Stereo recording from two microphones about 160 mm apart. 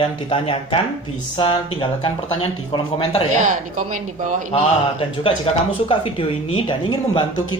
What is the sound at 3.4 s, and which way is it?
A woman's voice, 55° right (ahead or behind).